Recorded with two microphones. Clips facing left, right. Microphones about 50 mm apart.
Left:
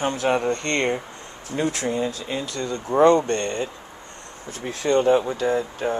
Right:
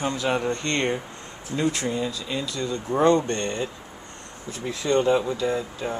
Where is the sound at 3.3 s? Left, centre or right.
Left.